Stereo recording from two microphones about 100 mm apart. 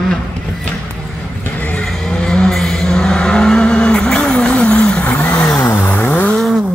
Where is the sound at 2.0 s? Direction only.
5° left (ahead or behind).